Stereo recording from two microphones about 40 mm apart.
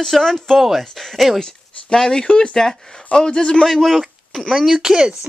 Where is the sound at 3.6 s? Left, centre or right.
Centre.